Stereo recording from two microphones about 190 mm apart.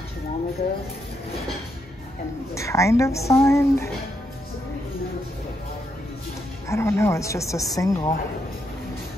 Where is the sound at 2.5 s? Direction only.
15° left (ahead or behind).